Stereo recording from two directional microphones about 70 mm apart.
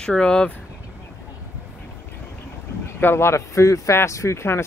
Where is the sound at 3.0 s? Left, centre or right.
Left.